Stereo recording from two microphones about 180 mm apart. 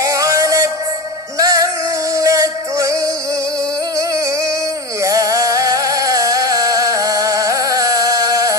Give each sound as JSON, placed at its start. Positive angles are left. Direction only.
{"t": 0.0, "sound": "music", "side_deg": -15}
{"t": 5.0, "sound": "music", "side_deg": -20}